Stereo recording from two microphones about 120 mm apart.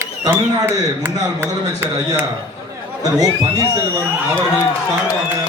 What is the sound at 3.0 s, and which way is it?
Speech, 35° right (ahead or behind).